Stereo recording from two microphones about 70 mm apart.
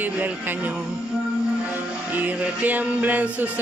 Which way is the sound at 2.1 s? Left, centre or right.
Right.